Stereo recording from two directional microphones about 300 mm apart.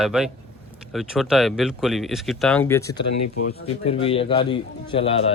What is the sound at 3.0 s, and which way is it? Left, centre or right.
Speech, left.